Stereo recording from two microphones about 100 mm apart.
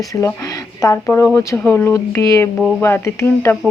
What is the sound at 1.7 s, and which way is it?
Speech, 20° left (ahead or behind).